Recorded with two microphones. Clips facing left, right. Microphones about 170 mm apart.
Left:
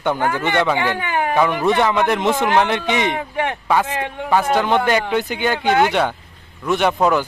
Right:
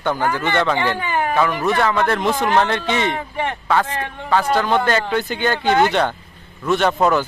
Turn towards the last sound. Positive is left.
turn(degrees=0)  # may be behind; listen again after turning